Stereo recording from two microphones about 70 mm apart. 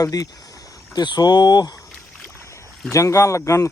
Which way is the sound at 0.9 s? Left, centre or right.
Left.